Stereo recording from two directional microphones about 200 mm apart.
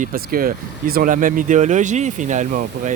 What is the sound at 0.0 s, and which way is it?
Speech, 45° right (ahead or behind).